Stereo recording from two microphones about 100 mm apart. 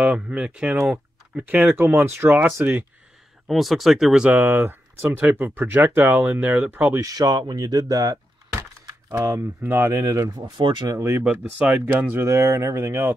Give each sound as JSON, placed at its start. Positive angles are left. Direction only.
{"t": 0.0, "sound": "speech", "side_deg": -10}
{"t": 3.4, "sound": "speech", "side_deg": 0}
{"t": 7.0, "sound": "speech", "side_deg": -40}
{"t": 9.1, "sound": "speech", "side_deg": -30}
{"t": 10.6, "sound": "speech", "side_deg": -50}
{"t": 11.0, "sound": "speech", "side_deg": -25}
{"t": 11.2, "sound": "speech", "side_deg": -15}